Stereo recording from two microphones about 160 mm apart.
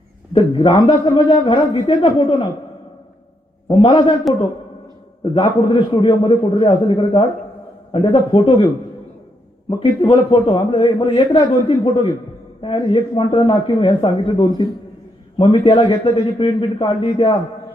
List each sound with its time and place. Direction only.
0.3 s a man's voice: 30° left (ahead or behind)
3.7 s a man's voice: 30° left (ahead or behind)
5.3 s a man's voice: 35° left (ahead or behind)